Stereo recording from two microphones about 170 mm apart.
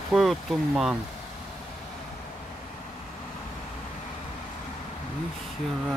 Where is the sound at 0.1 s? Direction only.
Centre (ahead or behind).